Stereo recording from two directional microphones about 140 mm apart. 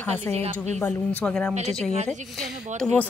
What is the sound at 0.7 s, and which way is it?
Speech, 10° left (ahead or behind).